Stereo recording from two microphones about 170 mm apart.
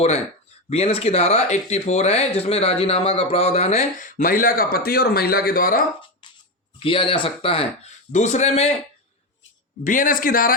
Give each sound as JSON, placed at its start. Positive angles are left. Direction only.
{"t": 0.7, "sound": "speech", "side_deg": 35}
{"t": 6.2, "sound": "a sound", "side_deg": 25}
{"t": 6.7, "sound": "speech", "side_deg": 30}
{"t": 9.8, "sound": "a man's voice", "side_deg": 50}